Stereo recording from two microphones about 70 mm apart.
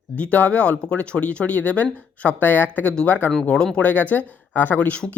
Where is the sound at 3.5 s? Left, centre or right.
Centre.